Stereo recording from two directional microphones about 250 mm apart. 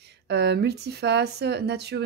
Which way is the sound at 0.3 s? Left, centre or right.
Right.